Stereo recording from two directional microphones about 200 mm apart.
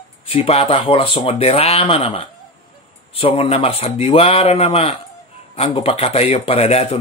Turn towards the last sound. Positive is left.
turn(degrees=30)  # may be behind; listen again after turning